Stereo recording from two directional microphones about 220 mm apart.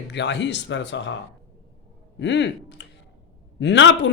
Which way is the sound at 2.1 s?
55° left (ahead or behind).